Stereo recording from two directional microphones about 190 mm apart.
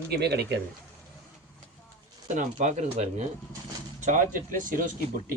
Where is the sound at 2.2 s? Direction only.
40° right (ahead or behind).